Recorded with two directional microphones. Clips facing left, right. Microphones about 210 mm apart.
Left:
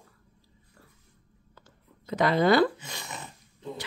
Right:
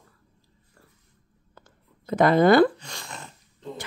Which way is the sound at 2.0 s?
50° right (ahead or behind).